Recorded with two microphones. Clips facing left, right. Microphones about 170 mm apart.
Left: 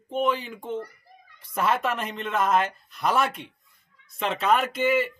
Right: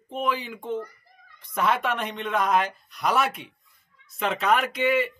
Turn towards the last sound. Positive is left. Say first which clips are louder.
# even
turn(degrees=0)  # may be behind; listen again after turning